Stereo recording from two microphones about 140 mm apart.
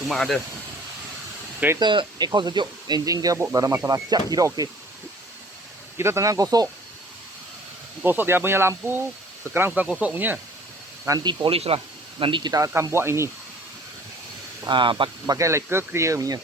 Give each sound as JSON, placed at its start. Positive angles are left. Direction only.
{"t": 0.1, "sound": "speech", "side_deg": 0}
{"t": 1.8, "sound": "speech", "side_deg": -35}
{"t": 6.0, "sound": "speech", "side_deg": -20}
{"t": 8.0, "sound": "speech", "side_deg": -15}
{"t": 11.0, "sound": "speech", "side_deg": -25}
{"t": 14.7, "sound": "speech", "side_deg": -35}
{"t": 15.4, "sound": "speech", "side_deg": -20}